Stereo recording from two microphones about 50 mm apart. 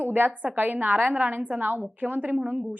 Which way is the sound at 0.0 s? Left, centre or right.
Right.